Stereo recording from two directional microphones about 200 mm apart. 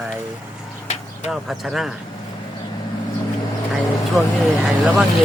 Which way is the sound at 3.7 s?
Centre (ahead or behind).